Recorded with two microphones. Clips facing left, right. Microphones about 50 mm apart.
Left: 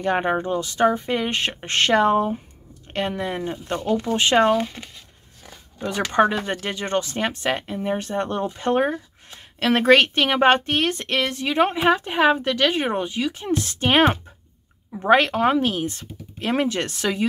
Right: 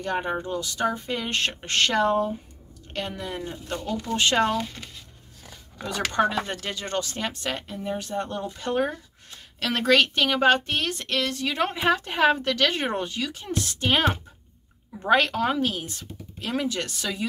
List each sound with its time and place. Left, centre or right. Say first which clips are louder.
0.0 s speech: left 6 dB; left
8.5 s speech: left 5 dB; left; by 13.2 s centre
13.2 s speech: left 6 dB; left